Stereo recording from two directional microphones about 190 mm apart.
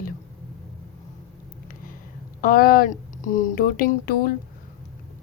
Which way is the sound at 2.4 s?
50° left (ahead or behind).